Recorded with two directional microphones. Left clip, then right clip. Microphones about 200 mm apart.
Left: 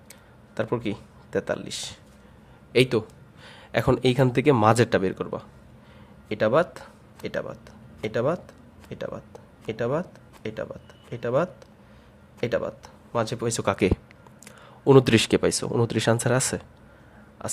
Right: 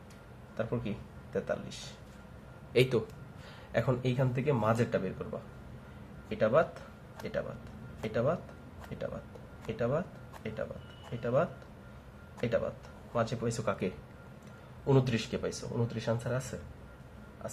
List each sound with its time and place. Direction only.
0.5 s speech: 50° left (ahead or behind)
2.7 s a man's voice: 35° left (ahead or behind)
3.5 s speech: 45° left (ahead or behind)
6.2 s speech: 50° left (ahead or behind)
8.0 s speech: 45° left (ahead or behind)
9.6 s speech: 50° left (ahead or behind)